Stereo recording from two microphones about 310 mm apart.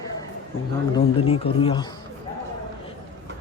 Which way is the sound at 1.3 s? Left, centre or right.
Centre.